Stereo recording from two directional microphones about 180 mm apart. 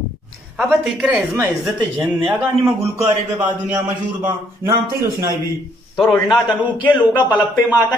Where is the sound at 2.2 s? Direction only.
15° right (ahead or behind).